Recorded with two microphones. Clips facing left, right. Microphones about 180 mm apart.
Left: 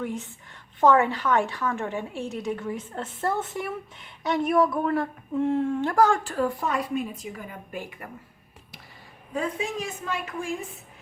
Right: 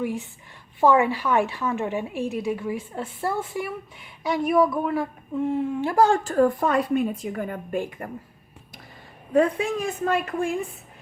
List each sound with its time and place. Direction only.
0.9 s a woman's voice: 15° right (ahead or behind)
2.2 s a woman's voice: 20° left (ahead or behind)
2.5 s a woman's voice: 10° right (ahead or behind)
6.0 s speech: 30° right (ahead or behind)
6.2 s a woman's voice: 45° right (ahead or behind)
9.3 s a woman's voice: 60° right (ahead or behind)